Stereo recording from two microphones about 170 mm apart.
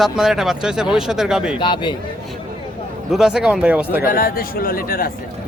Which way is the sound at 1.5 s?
30° left (ahead or behind).